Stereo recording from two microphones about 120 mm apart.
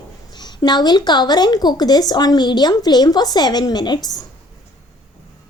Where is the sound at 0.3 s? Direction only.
35° left (ahead or behind).